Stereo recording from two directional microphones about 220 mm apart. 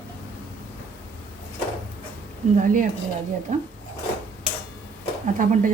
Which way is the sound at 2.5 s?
35° right (ahead or behind).